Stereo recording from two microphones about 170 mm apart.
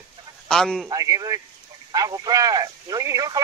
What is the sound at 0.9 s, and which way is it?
Speech, 20° right (ahead or behind).